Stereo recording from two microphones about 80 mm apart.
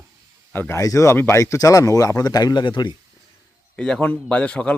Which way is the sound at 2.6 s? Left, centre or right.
Left.